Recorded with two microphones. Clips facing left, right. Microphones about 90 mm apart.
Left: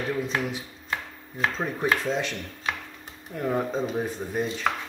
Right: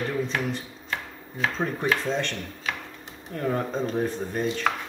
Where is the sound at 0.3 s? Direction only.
5° left (ahead or behind).